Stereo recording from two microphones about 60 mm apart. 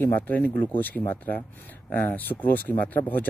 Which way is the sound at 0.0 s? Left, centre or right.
Left.